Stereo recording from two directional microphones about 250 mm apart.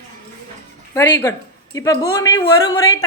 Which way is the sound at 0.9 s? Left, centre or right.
Centre.